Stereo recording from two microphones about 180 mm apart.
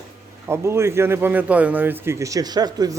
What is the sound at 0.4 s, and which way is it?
A man's voice, 15° right (ahead or behind).